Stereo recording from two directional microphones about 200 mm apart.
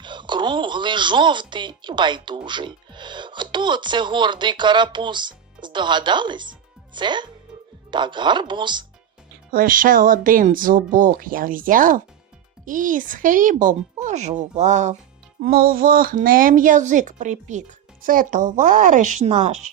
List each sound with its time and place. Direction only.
0.0 s speech: 25° right (ahead or behind)
9.5 s speech: 45° right (ahead or behind)
15.4 s speech: 50° right (ahead or behind)